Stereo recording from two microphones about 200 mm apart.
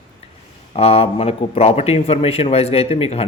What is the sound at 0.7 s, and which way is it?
Speech, 30° left (ahead or behind).